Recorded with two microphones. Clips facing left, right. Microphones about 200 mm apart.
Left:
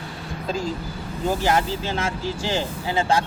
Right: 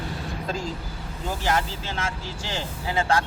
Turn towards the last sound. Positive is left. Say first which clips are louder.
# left 2 dB
turn(degrees=25)  # may be behind; listen again after turning